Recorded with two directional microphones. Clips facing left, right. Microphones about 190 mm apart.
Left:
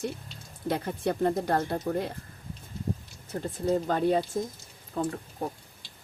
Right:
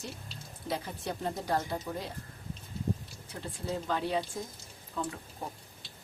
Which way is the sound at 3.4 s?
45° left (ahead or behind).